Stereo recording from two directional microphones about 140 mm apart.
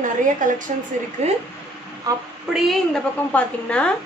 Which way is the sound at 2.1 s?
25° right (ahead or behind).